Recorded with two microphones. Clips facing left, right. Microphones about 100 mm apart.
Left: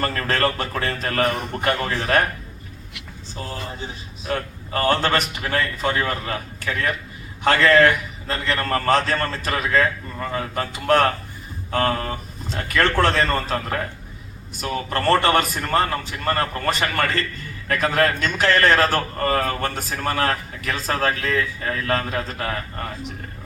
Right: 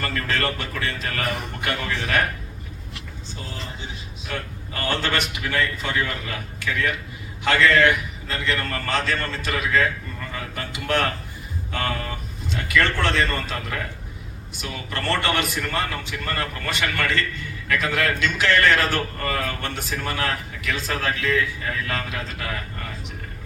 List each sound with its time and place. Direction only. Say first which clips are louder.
0.0 s a man's voice: left 4 dB; 40° left (ahead or behind)
3.3 s a man's voice: left 5 dB; 40° left (ahead or behind)